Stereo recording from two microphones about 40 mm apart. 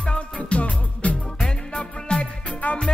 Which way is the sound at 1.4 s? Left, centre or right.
Left.